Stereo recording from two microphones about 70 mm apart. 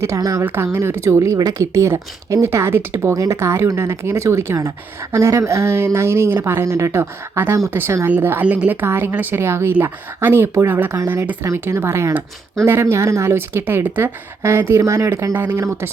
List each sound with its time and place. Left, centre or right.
0.2 s speech: right
0.4 s a woman's voice: right
3.2 s a woman's voice: right
7.0 s a woman's voice: right